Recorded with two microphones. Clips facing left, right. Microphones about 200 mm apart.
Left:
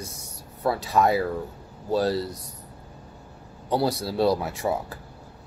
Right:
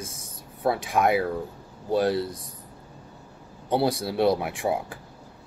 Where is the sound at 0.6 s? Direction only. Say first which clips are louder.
Left 1 dB; 20° right (ahead or behind).